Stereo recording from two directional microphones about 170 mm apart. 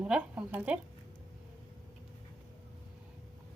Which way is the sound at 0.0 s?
5° right (ahead or behind).